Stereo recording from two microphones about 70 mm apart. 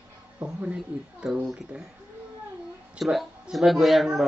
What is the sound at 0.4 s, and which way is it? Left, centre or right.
Speech, centre.